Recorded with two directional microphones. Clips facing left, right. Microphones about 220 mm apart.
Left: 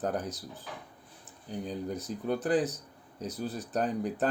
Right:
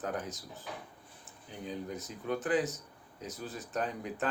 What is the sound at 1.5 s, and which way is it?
Speech, 35° left (ahead or behind).